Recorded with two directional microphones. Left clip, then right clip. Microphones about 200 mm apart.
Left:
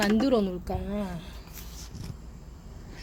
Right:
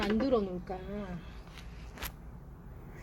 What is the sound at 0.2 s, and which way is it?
Speech, 25° left (ahead or behind).